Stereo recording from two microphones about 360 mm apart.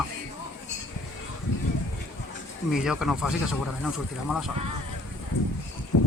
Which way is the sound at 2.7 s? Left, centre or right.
Centre.